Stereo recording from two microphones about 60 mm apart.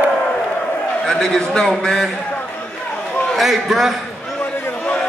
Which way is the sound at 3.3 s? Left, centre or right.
Centre.